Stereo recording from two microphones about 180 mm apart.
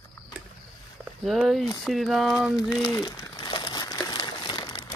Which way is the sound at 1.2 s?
Centre (ahead or behind).